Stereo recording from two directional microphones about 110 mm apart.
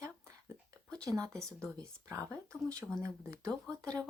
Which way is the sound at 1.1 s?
35° right (ahead or behind).